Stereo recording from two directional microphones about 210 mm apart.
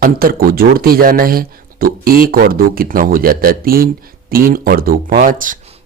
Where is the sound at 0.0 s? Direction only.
45° right (ahead or behind).